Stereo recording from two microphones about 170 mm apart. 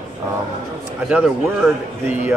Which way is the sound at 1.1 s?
10° right (ahead or behind).